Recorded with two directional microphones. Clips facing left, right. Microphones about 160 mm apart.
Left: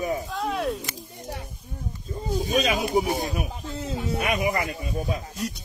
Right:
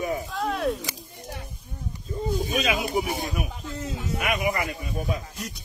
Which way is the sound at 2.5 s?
40° left (ahead or behind).